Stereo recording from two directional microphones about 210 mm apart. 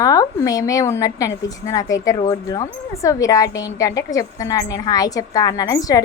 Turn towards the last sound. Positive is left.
turn(degrees=15)  # may be behind; listen again after turning